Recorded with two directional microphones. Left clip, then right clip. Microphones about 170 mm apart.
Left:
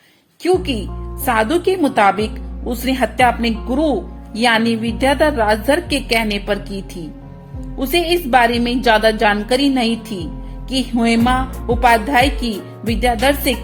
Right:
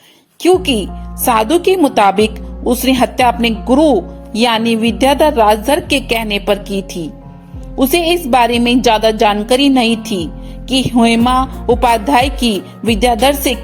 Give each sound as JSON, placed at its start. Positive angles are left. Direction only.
{"t": 0.4, "sound": "speech", "side_deg": -30}